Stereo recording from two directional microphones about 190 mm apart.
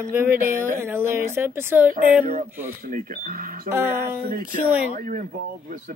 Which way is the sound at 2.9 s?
45° right (ahead or behind).